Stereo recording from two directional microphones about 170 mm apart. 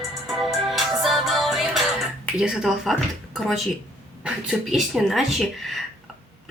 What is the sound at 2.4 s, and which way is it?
Speech, 5° right (ahead or behind).